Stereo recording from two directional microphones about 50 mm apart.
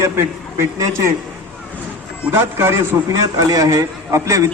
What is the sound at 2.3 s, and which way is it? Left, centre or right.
Speech, right.